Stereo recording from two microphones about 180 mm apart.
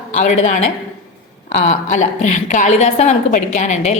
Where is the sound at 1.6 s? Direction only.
40° left (ahead or behind).